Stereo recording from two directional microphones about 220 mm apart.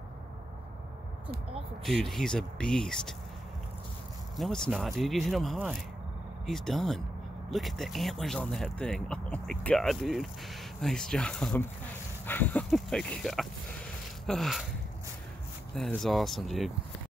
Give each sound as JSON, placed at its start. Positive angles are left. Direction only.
{"t": 1.2, "sound": "speech", "side_deg": -25}
{"t": 1.9, "sound": "speech", "side_deg": 0}
{"t": 4.4, "sound": "speech", "side_deg": 0}
{"t": 15.7, "sound": "speech", "side_deg": 0}